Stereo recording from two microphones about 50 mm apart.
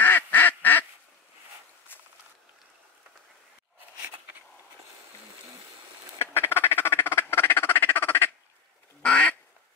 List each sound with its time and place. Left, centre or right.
0.0 s quack: left
6.1 s a sound: left
9.0 s quack: left